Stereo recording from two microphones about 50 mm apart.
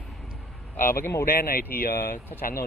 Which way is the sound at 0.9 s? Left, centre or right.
Left.